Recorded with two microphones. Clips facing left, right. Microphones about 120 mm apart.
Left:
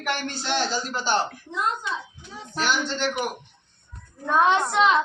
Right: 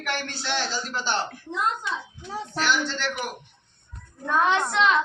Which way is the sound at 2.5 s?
15° left (ahead or behind).